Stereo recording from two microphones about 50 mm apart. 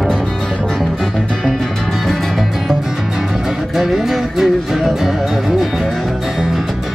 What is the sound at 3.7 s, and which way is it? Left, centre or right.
Music, centre.